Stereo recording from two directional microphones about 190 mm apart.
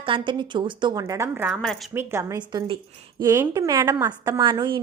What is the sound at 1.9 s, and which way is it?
A woman's voice, 15° right (ahead or behind).